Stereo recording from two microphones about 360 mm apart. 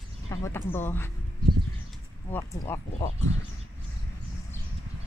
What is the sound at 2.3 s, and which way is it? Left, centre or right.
Speech, centre.